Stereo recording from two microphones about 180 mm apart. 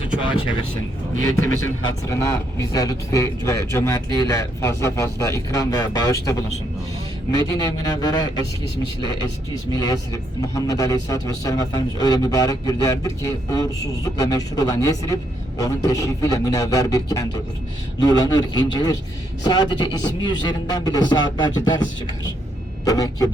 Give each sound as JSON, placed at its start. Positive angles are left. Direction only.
{"t": 1.8, "sound": "a man's voice", "side_deg": 15}
{"t": 9.7, "sound": "speech", "side_deg": 20}